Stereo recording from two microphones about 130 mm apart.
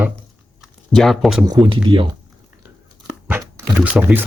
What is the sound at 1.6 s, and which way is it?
Speech, 40° right (ahead or behind).